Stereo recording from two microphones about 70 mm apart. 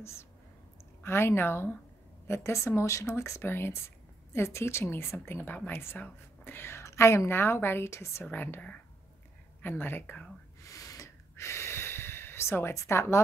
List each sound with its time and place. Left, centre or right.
0.0 s speech: left
8.3 s speech: left
10.6 s gasp: left
11.3 s gasp: left
12.7 s speech: left